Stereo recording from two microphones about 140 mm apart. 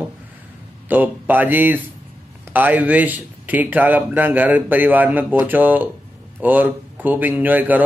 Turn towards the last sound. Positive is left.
turn(degrees=-10)  # may be behind; listen again after turning